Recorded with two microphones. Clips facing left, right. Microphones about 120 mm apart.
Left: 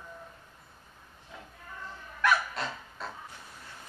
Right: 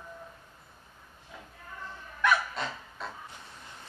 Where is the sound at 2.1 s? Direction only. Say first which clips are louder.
Even; centre (ahead or behind).